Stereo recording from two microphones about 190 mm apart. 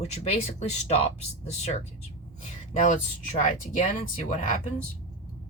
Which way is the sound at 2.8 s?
40° left (ahead or behind).